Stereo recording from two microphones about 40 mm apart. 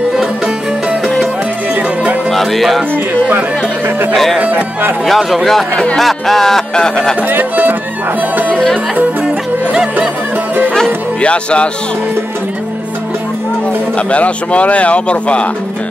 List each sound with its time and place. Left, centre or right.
2.3 s music: centre
4.1 s a man's voice: centre
4.4 s speech: right
5.0 s a man's voice: centre
6.7 s speech: centre
7.2 s speech: right
9.2 s music: right
11.1 s speech: left
13.9 s speech: left